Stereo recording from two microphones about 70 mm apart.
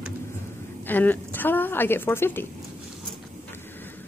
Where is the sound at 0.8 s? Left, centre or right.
Left.